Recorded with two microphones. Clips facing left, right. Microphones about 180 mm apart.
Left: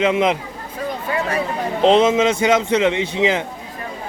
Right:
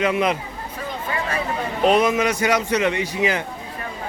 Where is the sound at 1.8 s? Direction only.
25° left (ahead or behind).